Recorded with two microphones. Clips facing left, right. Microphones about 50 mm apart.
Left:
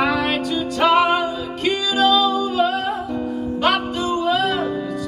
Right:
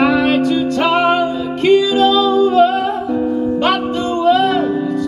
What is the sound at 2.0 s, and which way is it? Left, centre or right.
Music, right.